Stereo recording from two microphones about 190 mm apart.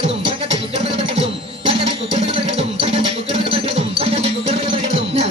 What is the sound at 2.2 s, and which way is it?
Music, 35° right (ahead or behind).